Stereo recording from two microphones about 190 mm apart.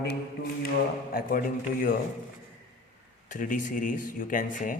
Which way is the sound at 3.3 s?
45° left (ahead or behind).